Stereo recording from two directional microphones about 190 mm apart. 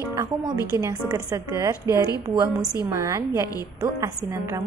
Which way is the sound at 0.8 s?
20° right (ahead or behind).